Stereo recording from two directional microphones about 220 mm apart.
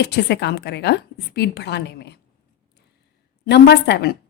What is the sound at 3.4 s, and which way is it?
Speech, 50° left (ahead or behind).